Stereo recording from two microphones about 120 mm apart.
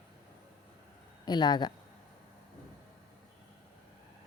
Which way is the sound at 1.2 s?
35° left (ahead or behind).